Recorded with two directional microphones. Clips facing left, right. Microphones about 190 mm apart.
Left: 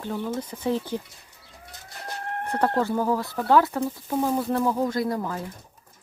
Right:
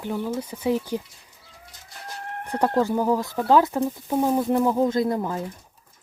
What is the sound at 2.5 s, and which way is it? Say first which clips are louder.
Speech: right 2 dB; 15° right (ahead or behind).